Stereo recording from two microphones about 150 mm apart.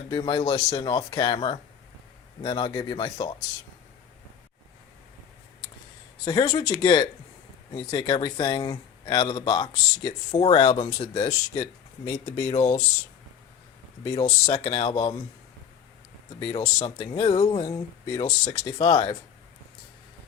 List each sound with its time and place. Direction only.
0.1 s speech: 30° left (ahead or behind)
6.2 s speech: 30° left (ahead or behind); by 12.8 s 45° left (ahead or behind)
14.2 s speech: 45° left (ahead or behind)
14.7 s speech: 35° left (ahead or behind)
16.4 s speech: 35° left (ahead or behind)